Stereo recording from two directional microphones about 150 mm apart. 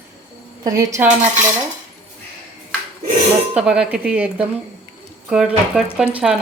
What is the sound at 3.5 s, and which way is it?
Speech, 10° right (ahead or behind).